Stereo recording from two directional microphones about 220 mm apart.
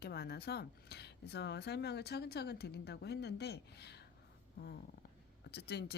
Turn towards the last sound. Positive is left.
turn(degrees=50)  # may be behind; listen again after turning